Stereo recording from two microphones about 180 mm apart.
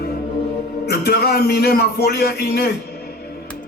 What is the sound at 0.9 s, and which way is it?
A man's voice, 60° left (ahead or behind).